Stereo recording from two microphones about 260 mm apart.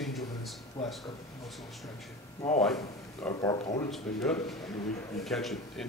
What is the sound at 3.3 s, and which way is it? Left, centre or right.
Speech, centre.